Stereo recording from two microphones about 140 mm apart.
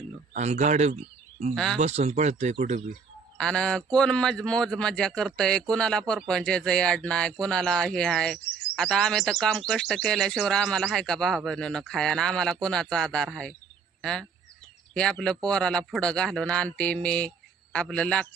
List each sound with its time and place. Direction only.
0.3 s speech: 55° right (ahead or behind)
1.5 s speech: 5° left (ahead or behind)
1.8 s speech: 50° right (ahead or behind)
3.3 s speech: 5° left (ahead or behind)